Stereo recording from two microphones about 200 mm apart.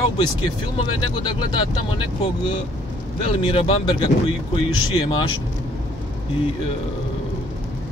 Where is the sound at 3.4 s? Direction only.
25° left (ahead or behind).